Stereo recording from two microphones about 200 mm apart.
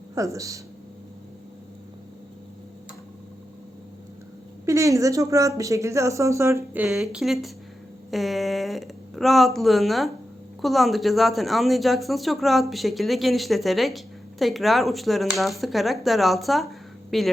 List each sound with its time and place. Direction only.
0.1 s speech: 15° right (ahead or behind)
4.6 s speech: 15° right (ahead or behind); by 17.3 s centre (ahead or behind)